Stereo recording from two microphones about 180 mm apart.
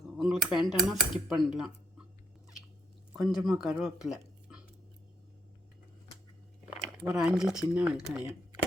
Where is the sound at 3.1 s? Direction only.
5° right (ahead or behind).